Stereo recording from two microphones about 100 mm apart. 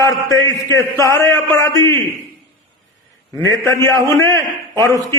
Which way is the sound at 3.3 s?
30° left (ahead or behind).